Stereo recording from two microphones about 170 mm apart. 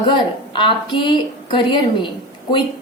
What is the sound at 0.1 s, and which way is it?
A woman's voice, 30° left (ahead or behind).